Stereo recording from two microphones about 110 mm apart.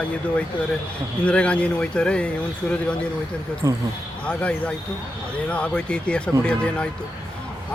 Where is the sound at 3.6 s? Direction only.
30° right (ahead or behind).